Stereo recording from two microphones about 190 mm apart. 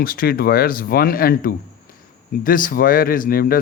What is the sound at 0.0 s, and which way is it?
Speech, 50° left (ahead or behind).